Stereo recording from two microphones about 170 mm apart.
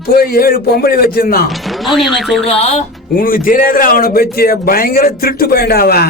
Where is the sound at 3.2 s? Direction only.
55° left (ahead or behind).